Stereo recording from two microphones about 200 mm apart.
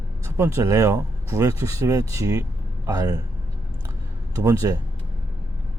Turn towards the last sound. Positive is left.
turn(degrees=-15)  # may be behind; listen again after turning